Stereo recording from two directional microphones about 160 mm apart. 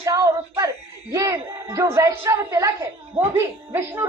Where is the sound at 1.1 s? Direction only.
20° right (ahead or behind).